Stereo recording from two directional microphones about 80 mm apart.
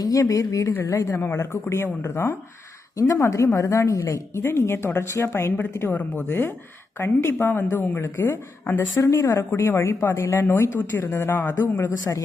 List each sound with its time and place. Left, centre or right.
0.0 s speech: left
0.7 s speech: left
0.9 s a woman's voice: left
9.0 s a woman's voice: left
11.0 s a woman's voice: left
11.3 s speech: left